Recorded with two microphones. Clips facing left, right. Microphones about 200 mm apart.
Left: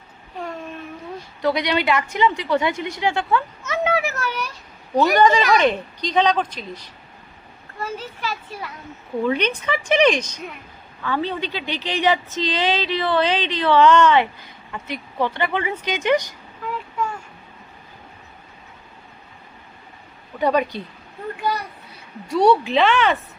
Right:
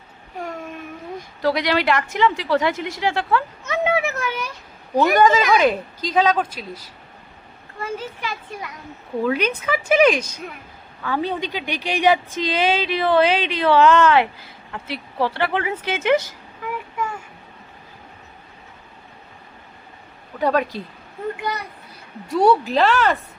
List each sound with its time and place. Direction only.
0.3 s a sound: 10° right (ahead or behind)
1.4 s a woman's voice: centre (ahead or behind)
3.7 s a sound: 20° right (ahead or behind)
5.1 s a woman's voice: 5° right (ahead or behind)
20.4 s a woman's voice: centre (ahead or behind)
22.3 s a woman's voice: centre (ahead or behind)